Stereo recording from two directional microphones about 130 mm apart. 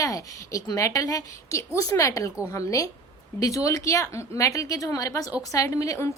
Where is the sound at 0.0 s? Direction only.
25° left (ahead or behind).